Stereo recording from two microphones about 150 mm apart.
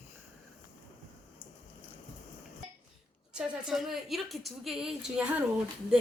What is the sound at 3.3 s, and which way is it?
A woman's voice, centre (ahead or behind).